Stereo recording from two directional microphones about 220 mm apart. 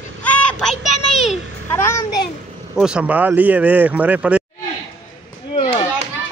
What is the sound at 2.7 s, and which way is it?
Speech, 5° right (ahead or behind).